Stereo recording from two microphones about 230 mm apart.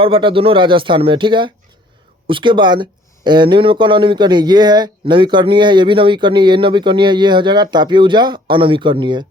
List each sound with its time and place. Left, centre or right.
0.0 s speech: right